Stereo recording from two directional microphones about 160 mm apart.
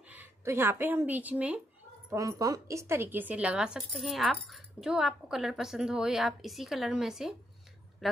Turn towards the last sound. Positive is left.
turn(degrees=-5)  # may be behind; listen again after turning